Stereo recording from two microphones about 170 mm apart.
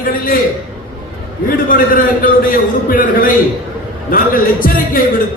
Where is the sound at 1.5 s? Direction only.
55° left (ahead or behind).